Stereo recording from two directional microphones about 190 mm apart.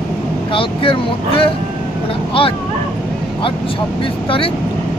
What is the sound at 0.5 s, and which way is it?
Speech, 25° left (ahead or behind).